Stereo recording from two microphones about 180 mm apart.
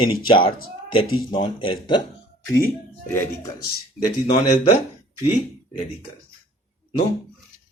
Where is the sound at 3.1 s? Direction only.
15° left (ahead or behind).